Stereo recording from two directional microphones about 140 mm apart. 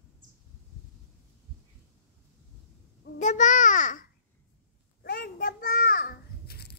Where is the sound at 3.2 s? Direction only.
65° left (ahead or behind).